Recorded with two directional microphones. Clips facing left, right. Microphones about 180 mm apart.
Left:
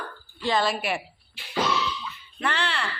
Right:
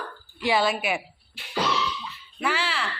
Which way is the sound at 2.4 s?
5° right (ahead or behind).